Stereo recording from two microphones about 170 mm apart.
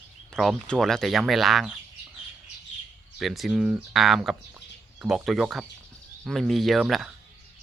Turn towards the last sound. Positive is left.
turn(degrees=0)  # may be behind; listen again after turning